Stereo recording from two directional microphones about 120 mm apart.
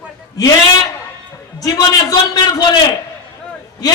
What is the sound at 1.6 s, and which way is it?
Speech, 30° left (ahead or behind).